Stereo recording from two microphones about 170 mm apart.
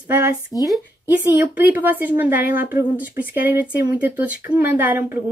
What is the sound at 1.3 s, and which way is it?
Speech, 10° right (ahead or behind).